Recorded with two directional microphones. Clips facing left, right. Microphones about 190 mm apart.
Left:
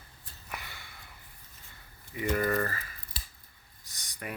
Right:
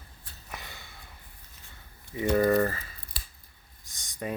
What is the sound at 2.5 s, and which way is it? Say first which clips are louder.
Speech: right 6 dB; 10° right (ahead or behind).